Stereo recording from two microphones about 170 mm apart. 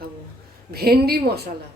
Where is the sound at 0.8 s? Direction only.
65° right (ahead or behind).